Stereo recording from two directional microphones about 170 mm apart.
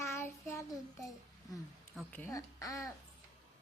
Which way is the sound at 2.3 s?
20° left (ahead or behind).